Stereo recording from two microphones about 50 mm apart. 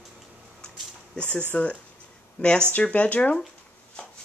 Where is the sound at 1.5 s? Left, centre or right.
Left.